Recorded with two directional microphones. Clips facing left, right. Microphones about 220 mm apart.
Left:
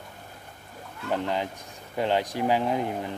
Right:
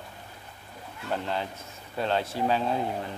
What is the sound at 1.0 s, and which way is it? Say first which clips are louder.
Speech: left 3 dB; 15° left (ahead or behind).